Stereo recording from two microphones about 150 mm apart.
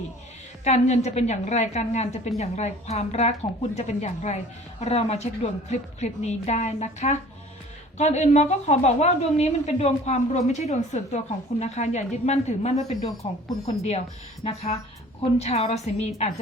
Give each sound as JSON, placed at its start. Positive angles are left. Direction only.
{"t": 0.6, "sound": "a woman's voice", "side_deg": 50}